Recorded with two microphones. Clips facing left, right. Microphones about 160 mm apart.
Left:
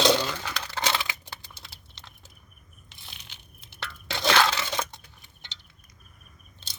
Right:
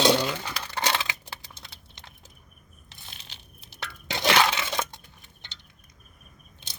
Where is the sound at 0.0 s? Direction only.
10° right (ahead or behind).